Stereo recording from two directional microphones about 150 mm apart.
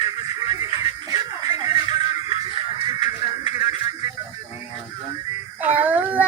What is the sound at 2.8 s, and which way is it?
Music, 30° right (ahead or behind).